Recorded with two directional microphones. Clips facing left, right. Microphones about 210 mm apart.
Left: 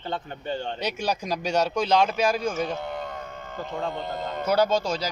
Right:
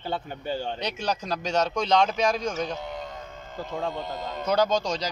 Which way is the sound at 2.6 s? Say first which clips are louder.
Left 2 dB; 55° left (ahead or behind).